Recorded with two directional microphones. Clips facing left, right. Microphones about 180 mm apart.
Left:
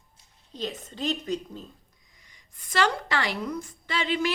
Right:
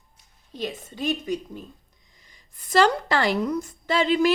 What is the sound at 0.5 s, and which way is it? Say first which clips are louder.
A woman's voice: right 2 dB; 10° right (ahead or behind).